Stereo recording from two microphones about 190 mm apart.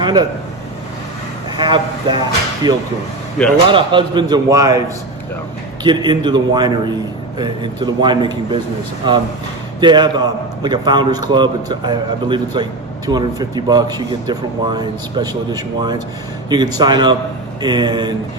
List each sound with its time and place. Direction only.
0.0 s speech: 20° right (ahead or behind)
1.6 s speech: 25° right (ahead or behind)
5.8 s speech: 25° right (ahead or behind)